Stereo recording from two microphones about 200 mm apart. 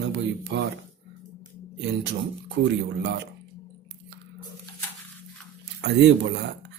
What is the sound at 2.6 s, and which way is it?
Speech, 55° right (ahead or behind).